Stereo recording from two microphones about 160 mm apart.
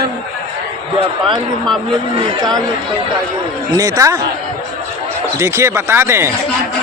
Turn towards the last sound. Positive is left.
turn(degrees=-15)  # may be behind; listen again after turning